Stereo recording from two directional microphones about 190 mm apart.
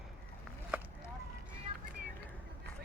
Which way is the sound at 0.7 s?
10° right (ahead or behind).